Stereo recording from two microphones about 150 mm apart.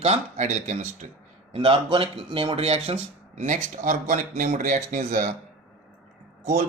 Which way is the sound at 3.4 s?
55° right (ahead or behind).